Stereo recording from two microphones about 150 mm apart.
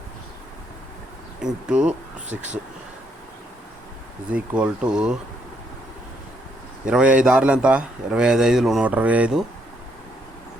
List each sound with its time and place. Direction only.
1.6 s speech: 5° right (ahead or behind)
4.3 s speech: 5° right (ahead or behind)
6.8 s a man's voice: 5° right (ahead or behind)